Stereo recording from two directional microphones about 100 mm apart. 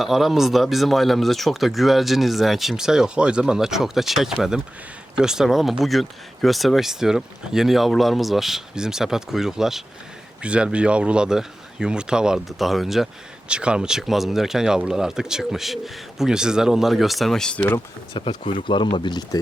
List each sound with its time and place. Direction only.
0.0 s speech: centre (ahead or behind)
18.1 s speech: 55° left (ahead or behind)